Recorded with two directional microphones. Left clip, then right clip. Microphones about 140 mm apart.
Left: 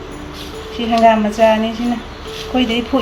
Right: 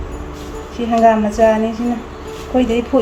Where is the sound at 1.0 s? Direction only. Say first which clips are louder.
Even; 15° right (ahead or behind).